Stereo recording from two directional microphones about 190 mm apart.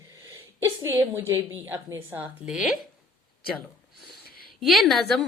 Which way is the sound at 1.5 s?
10° right (ahead or behind).